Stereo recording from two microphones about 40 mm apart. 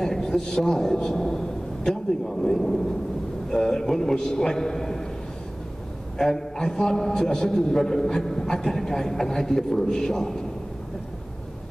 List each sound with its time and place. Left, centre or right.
0.0 s a man's voice: centre
6.1 s a man's voice: centre